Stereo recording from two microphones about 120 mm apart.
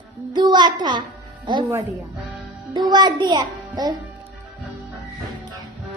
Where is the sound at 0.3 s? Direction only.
40° right (ahead or behind).